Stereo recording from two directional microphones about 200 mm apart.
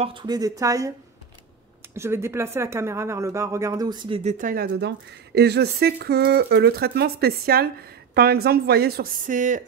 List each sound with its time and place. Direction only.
0.0 s speech: 25° right (ahead or behind)
2.0 s speech: 15° right (ahead or behind)
4.2 s speech: 40° right (ahead or behind)
4.6 s speech: 55° right (ahead or behind); by 9.6 s 40° right (ahead or behind)